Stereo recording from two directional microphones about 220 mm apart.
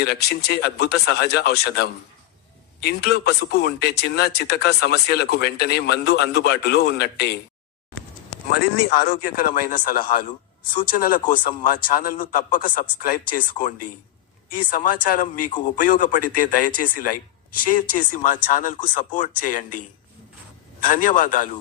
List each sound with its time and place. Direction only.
0.0 s speech: 45° left (ahead or behind)
9.4 s a man's voice: 40° left (ahead or behind)
20.8 s a man's voice: 40° left (ahead or behind)